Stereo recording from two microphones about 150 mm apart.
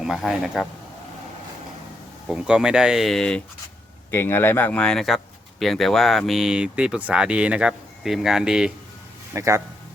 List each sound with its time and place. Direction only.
0.0 s speech: 5° right (ahead or behind)
2.2 s speech: 5° right (ahead or behind)
4.1 s speech: 15° left (ahead or behind); by 8.7 s 5° right (ahead or behind)
9.3 s a man's voice: 20° right (ahead or behind)